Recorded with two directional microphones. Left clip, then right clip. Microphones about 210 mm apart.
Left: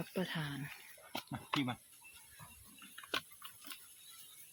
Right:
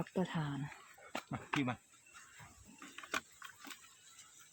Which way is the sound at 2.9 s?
20° right (ahead or behind).